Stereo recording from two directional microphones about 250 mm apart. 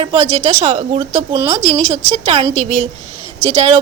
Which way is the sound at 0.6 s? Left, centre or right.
Right.